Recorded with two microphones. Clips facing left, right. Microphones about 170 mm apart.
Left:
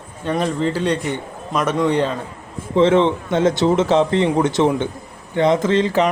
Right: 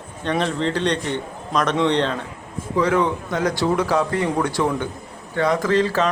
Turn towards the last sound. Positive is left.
turn(degrees=20)  # may be behind; listen again after turning